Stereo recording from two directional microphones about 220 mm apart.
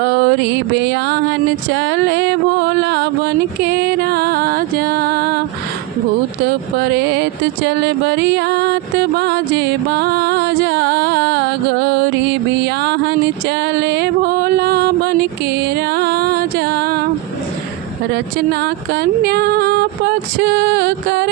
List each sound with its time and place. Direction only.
0.0 s music: 50° right (ahead or behind)
6.7 s music: 50° right (ahead or behind)
18.6 s a sound: 45° right (ahead or behind)